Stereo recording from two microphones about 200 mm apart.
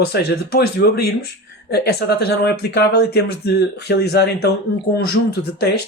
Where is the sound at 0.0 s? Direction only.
50° left (ahead or behind).